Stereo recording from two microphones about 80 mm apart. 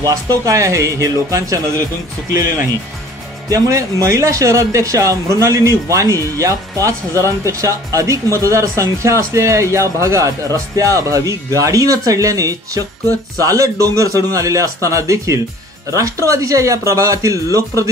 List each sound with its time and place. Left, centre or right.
0.0 s speech: right
3.4 s speech: right